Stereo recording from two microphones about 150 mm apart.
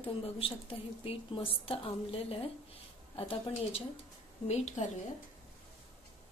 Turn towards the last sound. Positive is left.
turn(degrees=50)  # may be behind; listen again after turning